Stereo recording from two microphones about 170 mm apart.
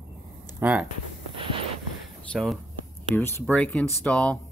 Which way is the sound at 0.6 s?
10° right (ahead or behind).